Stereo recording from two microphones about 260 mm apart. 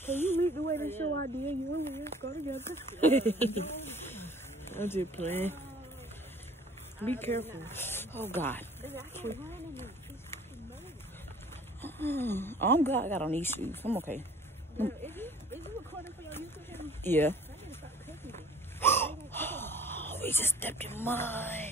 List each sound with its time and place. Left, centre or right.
0.0 s snake: centre
0.7 s speech: centre
1.0 s speech: right
2.5 s speech: centre
7.1 s speech: centre
11.8 s speech: centre
14.8 s a sound: centre
18.8 s speech: centre